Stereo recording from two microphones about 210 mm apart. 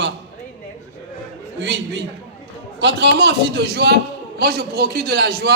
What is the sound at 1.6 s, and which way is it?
A man's voice, 55° right (ahead or behind).